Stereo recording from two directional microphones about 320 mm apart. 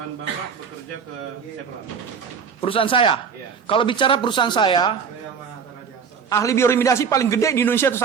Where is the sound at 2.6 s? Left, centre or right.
Centre.